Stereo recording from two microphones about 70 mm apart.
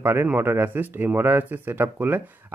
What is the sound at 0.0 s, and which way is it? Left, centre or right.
Speech, right.